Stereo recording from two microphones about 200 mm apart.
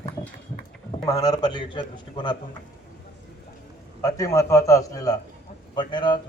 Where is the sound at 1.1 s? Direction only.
20° left (ahead or behind).